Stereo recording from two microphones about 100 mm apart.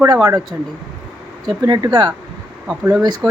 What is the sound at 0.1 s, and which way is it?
Speech, 40° right (ahead or behind).